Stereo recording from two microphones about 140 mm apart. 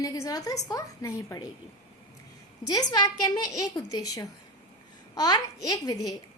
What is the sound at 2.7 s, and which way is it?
A woman's voice, 30° left (ahead or behind).